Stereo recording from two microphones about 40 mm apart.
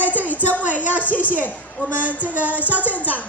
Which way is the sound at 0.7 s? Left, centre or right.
Left.